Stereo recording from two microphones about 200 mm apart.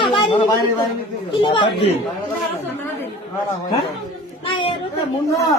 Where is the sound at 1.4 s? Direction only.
25° left (ahead or behind).